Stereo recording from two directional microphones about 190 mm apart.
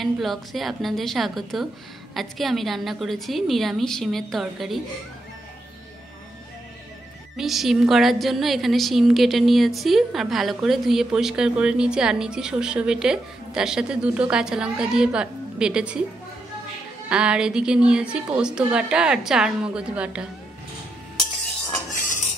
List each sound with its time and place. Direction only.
0.0 s a woman's voice: centre (ahead or behind)
7.3 s a woman's voice: centre (ahead or behind)
17.1 s a woman's voice: 5° right (ahead or behind)